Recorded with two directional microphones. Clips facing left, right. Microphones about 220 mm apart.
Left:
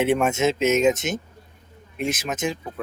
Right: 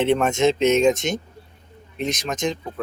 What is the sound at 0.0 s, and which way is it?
Speech, 5° left (ahead or behind).